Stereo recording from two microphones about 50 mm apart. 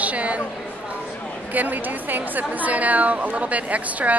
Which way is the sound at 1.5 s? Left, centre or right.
Right.